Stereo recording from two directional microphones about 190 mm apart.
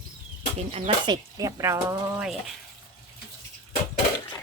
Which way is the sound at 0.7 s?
30° right (ahead or behind).